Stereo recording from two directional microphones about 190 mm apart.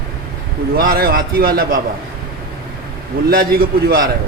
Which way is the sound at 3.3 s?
50° right (ahead or behind).